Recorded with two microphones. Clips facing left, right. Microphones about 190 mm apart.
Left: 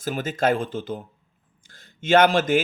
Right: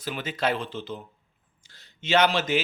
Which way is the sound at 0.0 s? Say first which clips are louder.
Left 5 dB; 45° left (ahead or behind).